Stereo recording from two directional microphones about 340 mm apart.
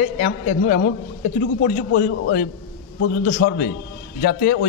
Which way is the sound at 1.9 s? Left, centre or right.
Left.